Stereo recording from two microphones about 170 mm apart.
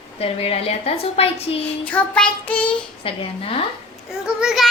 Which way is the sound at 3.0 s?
35° left (ahead or behind).